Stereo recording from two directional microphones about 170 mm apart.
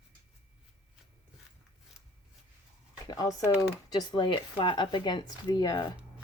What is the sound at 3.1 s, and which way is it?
A woman's voice, 20° left (ahead or behind).